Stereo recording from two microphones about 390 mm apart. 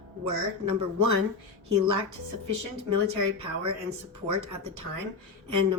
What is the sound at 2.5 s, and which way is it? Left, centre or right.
Speech, right.